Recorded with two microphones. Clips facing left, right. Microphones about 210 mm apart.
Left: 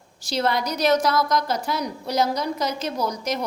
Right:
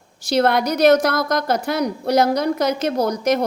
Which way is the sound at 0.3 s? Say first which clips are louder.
Right 6 dB; 60° right (ahead or behind).